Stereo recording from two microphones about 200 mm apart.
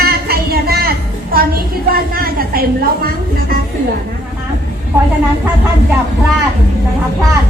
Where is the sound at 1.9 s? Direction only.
50° right (ahead or behind).